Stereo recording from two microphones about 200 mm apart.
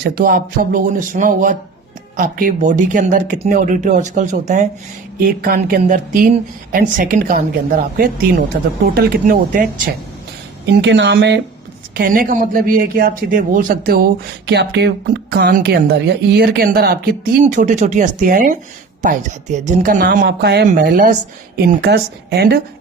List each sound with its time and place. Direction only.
0.0 s speech: 45° right (ahead or behind)
9.0 s speech: 50° right (ahead or behind)
10.7 s speech: 60° right (ahead or behind)
11.9 s speech: 45° right (ahead or behind)
17.4 s speech: 35° right (ahead or behind); by 20.7 s 55° right (ahead or behind)
20.8 s speech: 40° right (ahead or behind)